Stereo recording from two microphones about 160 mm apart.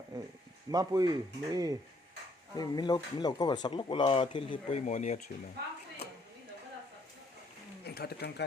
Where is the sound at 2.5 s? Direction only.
25° left (ahead or behind).